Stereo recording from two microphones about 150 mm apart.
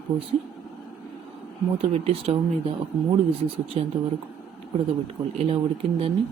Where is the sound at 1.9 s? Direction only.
40° right (ahead or behind).